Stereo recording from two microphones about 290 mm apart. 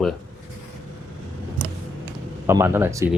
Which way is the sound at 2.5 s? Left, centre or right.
Centre.